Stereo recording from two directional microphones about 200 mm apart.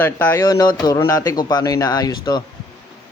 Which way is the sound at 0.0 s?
10° left (ahead or behind).